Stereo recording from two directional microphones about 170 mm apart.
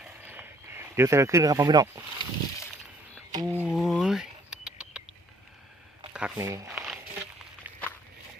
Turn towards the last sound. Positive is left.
turn(degrees=-15)  # may be behind; listen again after turning